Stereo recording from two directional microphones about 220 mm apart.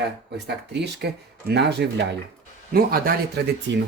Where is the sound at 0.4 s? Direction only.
50° right (ahead or behind).